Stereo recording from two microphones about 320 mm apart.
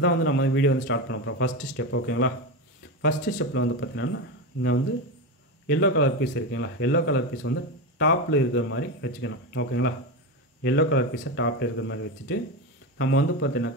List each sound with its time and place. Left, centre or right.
0.0 s speech: left
5.7 s speech: left